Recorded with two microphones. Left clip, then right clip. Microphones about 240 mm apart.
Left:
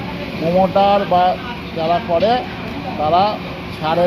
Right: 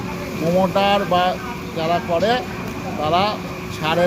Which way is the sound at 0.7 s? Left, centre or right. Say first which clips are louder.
Left 5 dB; right.